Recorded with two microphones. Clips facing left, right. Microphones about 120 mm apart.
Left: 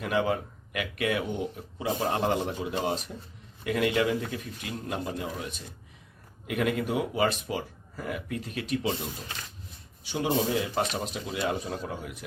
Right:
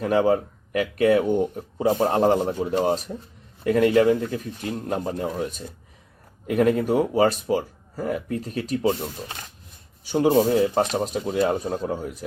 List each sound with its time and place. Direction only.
0.0 s speech: 35° right (ahead or behind)
10.0 s speech: 45° right (ahead or behind)